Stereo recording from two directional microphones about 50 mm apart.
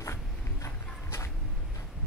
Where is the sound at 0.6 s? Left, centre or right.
Left.